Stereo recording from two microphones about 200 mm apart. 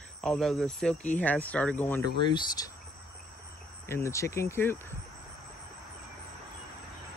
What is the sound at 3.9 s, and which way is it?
Speech, 15° left (ahead or behind).